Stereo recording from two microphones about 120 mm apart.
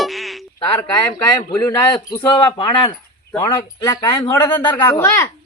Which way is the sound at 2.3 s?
40° left (ahead or behind).